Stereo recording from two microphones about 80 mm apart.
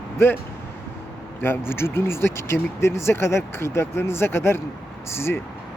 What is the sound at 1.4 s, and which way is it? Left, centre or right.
Speech, left.